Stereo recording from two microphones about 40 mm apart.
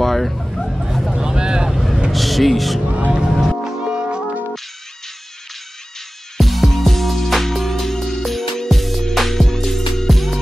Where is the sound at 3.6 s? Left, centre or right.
Right.